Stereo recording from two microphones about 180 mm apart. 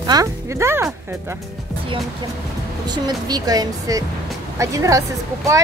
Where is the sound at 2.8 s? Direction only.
20° right (ahead or behind).